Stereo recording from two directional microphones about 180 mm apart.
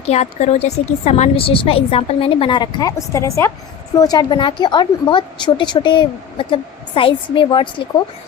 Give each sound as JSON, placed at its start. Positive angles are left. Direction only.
{"t": 0.0, "sound": "a woman's voice", "side_deg": 35}